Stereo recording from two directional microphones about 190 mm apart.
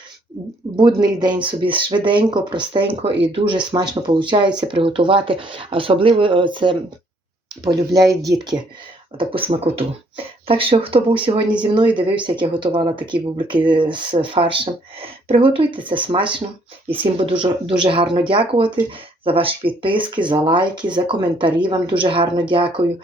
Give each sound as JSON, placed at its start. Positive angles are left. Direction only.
{"t": 0.8, "sound": "speech", "side_deg": -20}